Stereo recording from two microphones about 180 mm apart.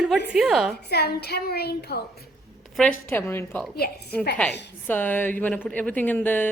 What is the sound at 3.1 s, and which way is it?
Speech, 10° left (ahead or behind).